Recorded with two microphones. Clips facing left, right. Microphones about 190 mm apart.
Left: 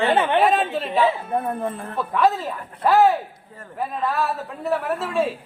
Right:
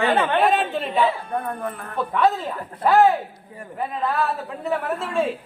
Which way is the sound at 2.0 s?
Centre (ahead or behind).